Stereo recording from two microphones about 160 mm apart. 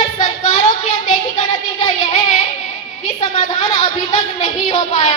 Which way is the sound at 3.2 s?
40° left (ahead or behind).